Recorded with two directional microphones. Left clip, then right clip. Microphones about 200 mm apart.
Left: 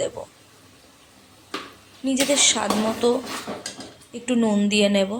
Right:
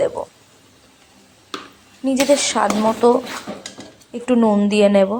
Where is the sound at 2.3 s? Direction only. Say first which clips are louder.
Right 2 dB; 15° right (ahead or behind).